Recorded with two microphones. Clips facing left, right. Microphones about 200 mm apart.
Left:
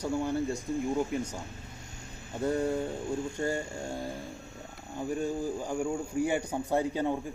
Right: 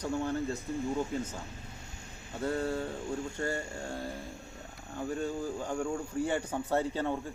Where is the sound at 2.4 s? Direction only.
15° left (ahead or behind).